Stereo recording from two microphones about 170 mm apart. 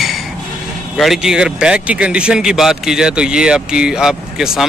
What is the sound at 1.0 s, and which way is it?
Speech, centre (ahead or behind).